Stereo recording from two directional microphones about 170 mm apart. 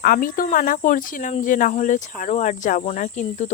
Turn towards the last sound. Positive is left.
turn(degrees=45)  # may be behind; listen again after turning